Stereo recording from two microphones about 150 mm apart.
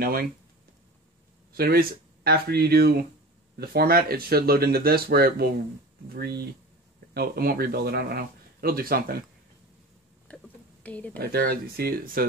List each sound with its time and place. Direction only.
0.0 s speech: 90° right
1.5 s speech: 90° right
10.2 s a sound: 10° left (ahead or behind)
11.1 s speech: 90° right